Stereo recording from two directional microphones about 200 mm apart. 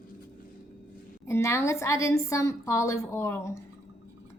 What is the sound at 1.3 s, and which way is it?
A woman's voice, 15° left (ahead or behind).